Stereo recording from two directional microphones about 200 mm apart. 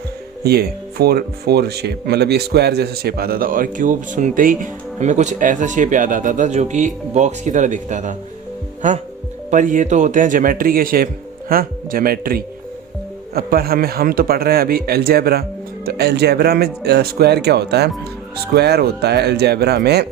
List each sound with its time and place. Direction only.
0.4 s speech: 50° right (ahead or behind)
9.5 s speech: 40° right (ahead or behind)